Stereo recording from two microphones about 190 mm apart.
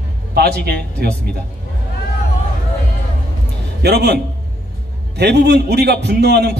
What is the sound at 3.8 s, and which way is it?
A man's voice, 60° right (ahead or behind).